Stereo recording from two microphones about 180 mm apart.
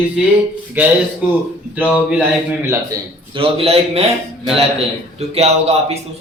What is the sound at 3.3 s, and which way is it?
A man's voice, 30° right (ahead or behind).